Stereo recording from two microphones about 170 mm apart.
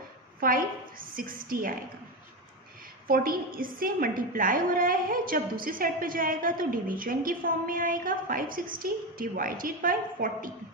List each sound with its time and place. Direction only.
0.3 s a woman's voice: 55° right (ahead or behind)
3.1 s a woman's voice: 60° right (ahead or behind)